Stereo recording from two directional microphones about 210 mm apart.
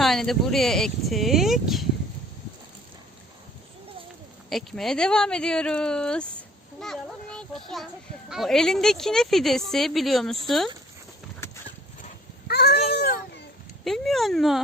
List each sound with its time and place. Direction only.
0.0 s speech: centre (ahead or behind)
4.4 s a child's voice: centre (ahead or behind)
12.5 s a sound: 50° left (ahead or behind)
13.0 s children playing: 50° left (ahead or behind)
13.8 s speech: centre (ahead or behind)